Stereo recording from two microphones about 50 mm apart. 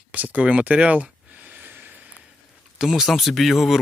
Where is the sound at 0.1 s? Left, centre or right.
Right.